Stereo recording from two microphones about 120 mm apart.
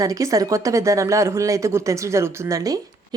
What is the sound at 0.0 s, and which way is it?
A woman's voice, 30° right (ahead or behind).